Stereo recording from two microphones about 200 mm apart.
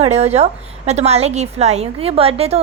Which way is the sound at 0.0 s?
30° right (ahead or behind).